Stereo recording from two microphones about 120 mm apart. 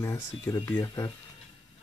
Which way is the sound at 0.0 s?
25° left (ahead or behind).